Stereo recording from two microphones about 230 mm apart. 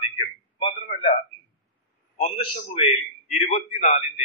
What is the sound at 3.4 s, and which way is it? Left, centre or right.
Speech, left.